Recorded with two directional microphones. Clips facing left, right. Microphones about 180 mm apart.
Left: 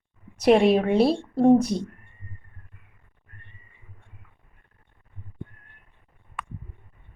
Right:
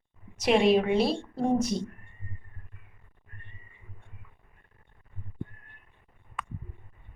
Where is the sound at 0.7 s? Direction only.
55° left (ahead or behind).